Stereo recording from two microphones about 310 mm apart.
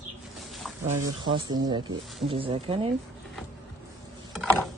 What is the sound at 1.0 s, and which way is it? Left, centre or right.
Speech, centre.